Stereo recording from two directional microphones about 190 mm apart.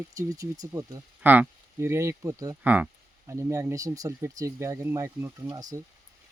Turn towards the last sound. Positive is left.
turn(degrees=-15)  # may be behind; listen again after turning